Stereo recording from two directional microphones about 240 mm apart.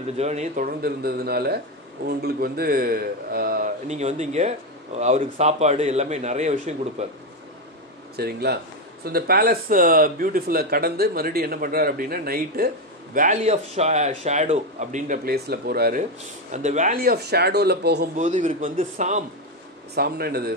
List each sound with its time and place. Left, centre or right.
0.2 s a man's voice: right
8.2 s speech: right
18.1 s speech: right